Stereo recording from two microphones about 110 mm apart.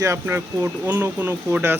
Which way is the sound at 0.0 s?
25° right (ahead or behind).